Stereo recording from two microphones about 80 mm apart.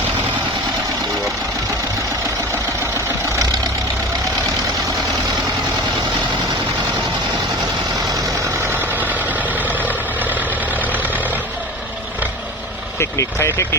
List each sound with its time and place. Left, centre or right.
8.6 s vehicle: right
13.0 s speech: left